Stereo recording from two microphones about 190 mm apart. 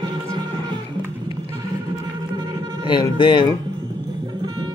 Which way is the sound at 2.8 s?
25° left (ahead or behind).